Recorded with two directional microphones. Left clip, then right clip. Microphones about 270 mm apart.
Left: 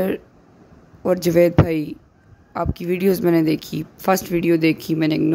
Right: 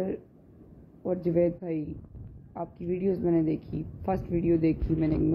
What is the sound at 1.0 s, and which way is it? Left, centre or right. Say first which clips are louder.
Speech: left 10 dB; left.